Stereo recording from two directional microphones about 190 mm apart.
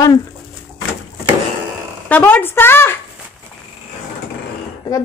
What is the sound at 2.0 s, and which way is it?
Speech, 10° left (ahead or behind).